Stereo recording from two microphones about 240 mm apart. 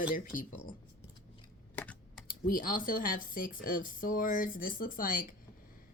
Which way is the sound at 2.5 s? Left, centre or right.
Left.